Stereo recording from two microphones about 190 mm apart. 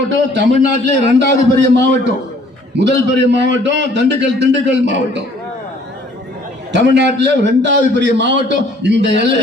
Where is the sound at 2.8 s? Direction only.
70° right (ahead or behind).